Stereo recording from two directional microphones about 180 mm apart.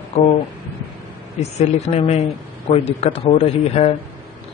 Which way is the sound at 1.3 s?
40° left (ahead or behind).